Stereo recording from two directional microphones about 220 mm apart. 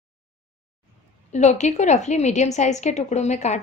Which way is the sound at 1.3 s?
30° left (ahead or behind).